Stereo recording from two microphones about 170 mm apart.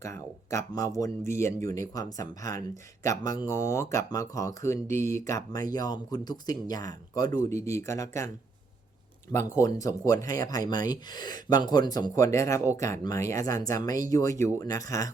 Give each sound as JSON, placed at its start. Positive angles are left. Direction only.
{"t": 0.0, "sound": "speech", "side_deg": 15}
{"t": 9.6, "sound": "speech", "side_deg": 20}